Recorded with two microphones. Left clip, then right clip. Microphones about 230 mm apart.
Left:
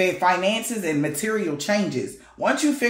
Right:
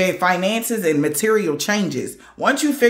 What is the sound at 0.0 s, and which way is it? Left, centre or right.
Speech, right.